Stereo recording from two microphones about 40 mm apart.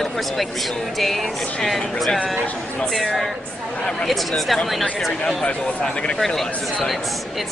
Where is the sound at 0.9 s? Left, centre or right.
Centre.